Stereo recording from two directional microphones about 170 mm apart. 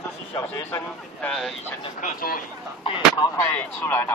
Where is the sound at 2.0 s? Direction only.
55° left (ahead or behind).